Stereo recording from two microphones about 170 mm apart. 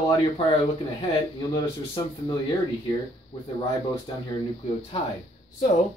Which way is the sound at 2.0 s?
20° left (ahead or behind).